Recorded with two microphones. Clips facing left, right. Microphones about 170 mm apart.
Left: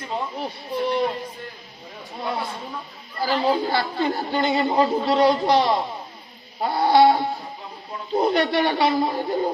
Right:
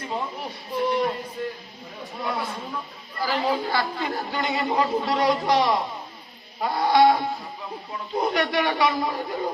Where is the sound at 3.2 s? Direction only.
30° left (ahead or behind).